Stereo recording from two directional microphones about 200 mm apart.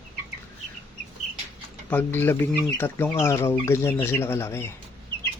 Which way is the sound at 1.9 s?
10° left (ahead or behind).